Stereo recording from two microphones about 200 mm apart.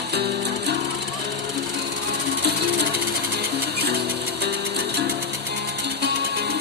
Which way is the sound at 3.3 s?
55° right (ahead or behind).